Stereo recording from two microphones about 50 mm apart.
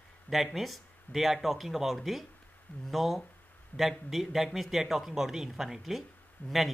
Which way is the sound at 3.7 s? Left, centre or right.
Left.